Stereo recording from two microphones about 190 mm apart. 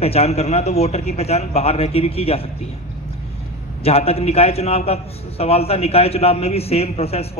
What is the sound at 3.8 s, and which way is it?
A man's voice, 30° left (ahead or behind).